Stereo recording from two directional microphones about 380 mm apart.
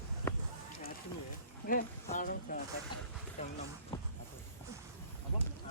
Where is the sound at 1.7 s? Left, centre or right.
Left.